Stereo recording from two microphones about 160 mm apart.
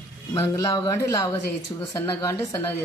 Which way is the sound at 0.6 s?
20° left (ahead or behind).